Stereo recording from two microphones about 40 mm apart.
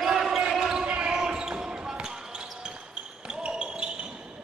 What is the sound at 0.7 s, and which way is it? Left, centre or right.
Basketball bounce, right.